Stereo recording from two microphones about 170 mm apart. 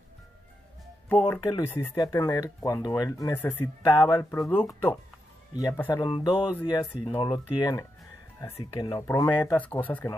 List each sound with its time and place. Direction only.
1.0 s speech: 10° left (ahead or behind)